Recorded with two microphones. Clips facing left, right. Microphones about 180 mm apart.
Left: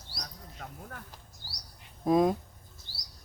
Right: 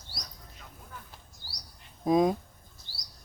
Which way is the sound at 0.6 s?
70° left (ahead or behind).